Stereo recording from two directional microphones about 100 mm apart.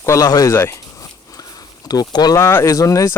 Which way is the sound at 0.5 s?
25° left (ahead or behind).